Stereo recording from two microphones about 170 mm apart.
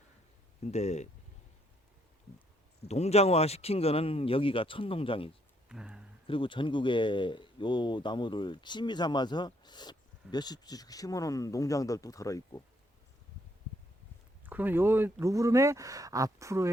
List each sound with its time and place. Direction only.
0.6 s speech: 40° left (ahead or behind)
2.8 s speech: 40° left (ahead or behind)
5.6 s speech: 5° right (ahead or behind)
6.2 s speech: 30° left (ahead or behind)
14.4 s speech: 10° right (ahead or behind)